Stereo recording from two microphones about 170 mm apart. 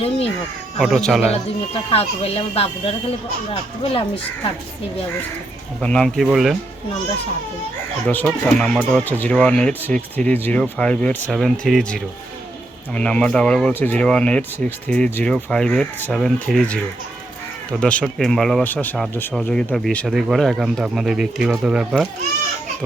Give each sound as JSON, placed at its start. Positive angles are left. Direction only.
{"t": 0.8, "sound": "speech", "side_deg": 0}
{"t": 1.3, "sound": "speech", "side_deg": 35}
{"t": 5.8, "sound": "speech", "side_deg": 5}
{"t": 8.0, "sound": "speech", "side_deg": 10}